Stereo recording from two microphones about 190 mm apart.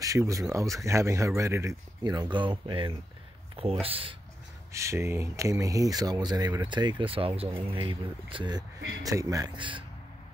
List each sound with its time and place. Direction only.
0.0 s speech: 15° right (ahead or behind)
4.7 s speech: 15° right (ahead or behind)